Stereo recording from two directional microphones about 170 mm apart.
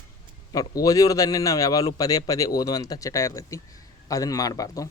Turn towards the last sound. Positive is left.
turn(degrees=20)  # may be behind; listen again after turning